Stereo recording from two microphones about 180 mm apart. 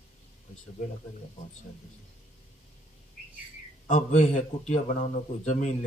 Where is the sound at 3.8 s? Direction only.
45° left (ahead or behind).